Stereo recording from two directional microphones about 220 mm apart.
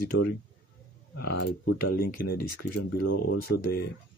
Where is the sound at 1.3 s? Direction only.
50° left (ahead or behind).